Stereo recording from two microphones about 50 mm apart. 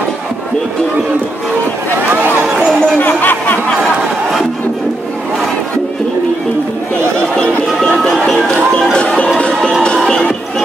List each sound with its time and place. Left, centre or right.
2.0 s a sound: right
3.0 s music: left
7.0 s chatter: right
7.5 s music: left
8.0 s music: centre
8.9 s music: left